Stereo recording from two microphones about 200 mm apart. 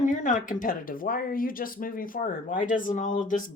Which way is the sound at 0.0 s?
40° left (ahead or behind).